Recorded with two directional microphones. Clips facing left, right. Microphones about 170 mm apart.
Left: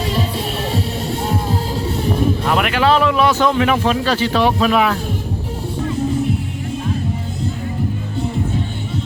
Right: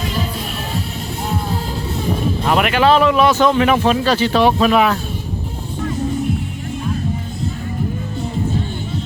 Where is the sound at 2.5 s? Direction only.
20° right (ahead or behind).